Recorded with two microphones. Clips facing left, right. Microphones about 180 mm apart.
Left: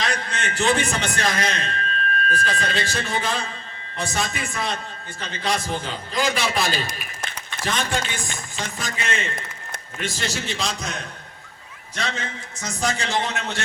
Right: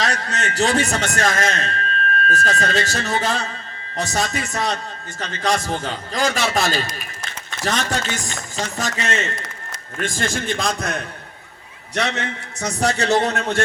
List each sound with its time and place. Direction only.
0.0 s a man's voice: 40° right (ahead or behind); by 11.0 s 55° right (ahead or behind)
11.9 s a man's voice: 70° right (ahead or behind)
13.1 s a man's voice: 40° right (ahead or behind)